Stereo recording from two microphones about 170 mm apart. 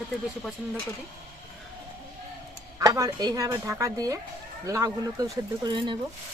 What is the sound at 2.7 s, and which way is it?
Speech, 20° right (ahead or behind).